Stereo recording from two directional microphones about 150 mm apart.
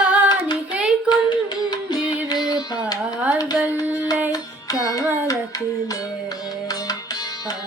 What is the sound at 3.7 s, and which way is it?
Child singing, 25° left (ahead or behind).